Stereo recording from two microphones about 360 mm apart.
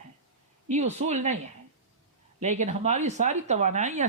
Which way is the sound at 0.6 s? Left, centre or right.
Centre.